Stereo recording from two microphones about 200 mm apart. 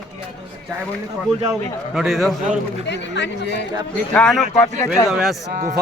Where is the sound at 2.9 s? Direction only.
60° left (ahead or behind).